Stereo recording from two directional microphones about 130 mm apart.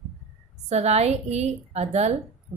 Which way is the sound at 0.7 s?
55° right (ahead or behind).